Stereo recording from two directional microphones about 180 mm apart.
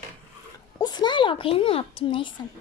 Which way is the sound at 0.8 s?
25° left (ahead or behind).